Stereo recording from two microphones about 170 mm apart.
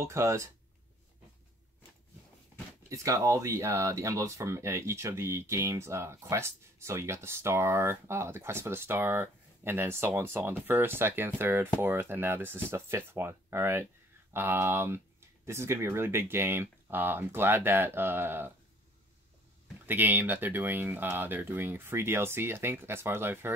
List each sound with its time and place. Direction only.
0.0 s speech: 15° right (ahead or behind)
2.9 s speech: 20° right (ahead or behind)
19.9 s speech: 10° right (ahead or behind)